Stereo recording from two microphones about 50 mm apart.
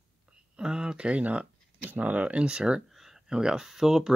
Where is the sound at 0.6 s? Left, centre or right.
Centre.